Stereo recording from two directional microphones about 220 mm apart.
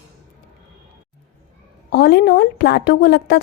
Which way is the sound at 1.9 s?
50° left (ahead or behind).